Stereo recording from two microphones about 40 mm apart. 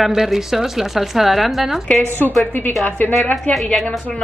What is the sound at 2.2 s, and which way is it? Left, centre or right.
Speech, left.